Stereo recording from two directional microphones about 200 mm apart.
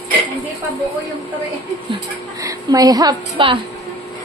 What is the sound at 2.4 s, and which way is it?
A woman's voice, 20° right (ahead or behind).